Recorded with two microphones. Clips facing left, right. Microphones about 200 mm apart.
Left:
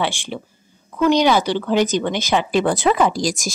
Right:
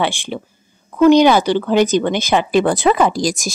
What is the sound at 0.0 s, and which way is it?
Speech, 55° right (ahead or behind).